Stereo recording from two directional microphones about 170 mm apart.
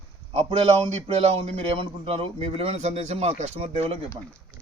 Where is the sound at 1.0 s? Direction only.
35° right (ahead or behind).